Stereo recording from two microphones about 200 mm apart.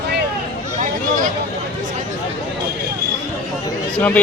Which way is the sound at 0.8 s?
40° right (ahead or behind).